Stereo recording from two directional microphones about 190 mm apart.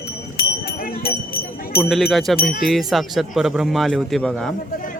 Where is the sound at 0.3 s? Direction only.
50° left (ahead or behind).